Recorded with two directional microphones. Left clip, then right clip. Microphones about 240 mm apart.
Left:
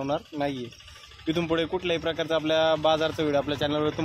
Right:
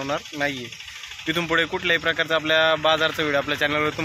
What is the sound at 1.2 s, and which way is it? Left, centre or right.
Speech, centre.